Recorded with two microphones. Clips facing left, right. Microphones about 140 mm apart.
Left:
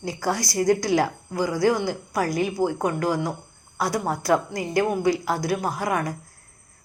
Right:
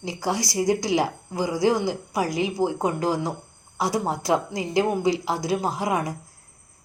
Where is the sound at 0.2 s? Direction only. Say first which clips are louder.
Even; 10° right (ahead or behind).